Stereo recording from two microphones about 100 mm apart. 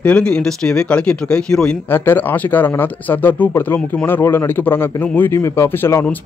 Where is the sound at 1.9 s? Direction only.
20° left (ahead or behind).